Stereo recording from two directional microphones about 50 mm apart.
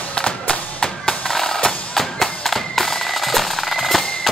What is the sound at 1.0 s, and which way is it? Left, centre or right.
Music, centre.